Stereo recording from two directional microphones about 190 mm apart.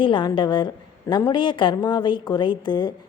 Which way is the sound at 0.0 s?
25° left (ahead or behind).